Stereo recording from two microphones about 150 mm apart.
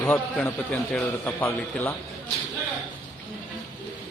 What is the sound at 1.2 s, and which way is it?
Speech, 15° left (ahead or behind).